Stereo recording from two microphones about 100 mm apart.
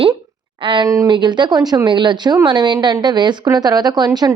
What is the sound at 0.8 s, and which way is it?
Speech, 30° right (ahead or behind).